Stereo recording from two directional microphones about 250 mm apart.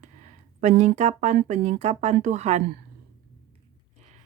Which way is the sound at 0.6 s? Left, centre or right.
Right.